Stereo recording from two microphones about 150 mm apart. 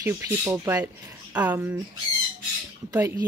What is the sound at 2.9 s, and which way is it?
Speech, 15° right (ahead or behind).